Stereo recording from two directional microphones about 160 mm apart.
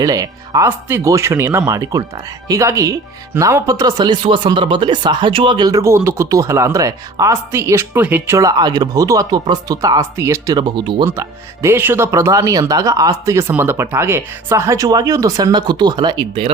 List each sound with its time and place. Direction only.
0.0 s speech: 20° right (ahead or behind)
11.1 s speech: 15° right (ahead or behind)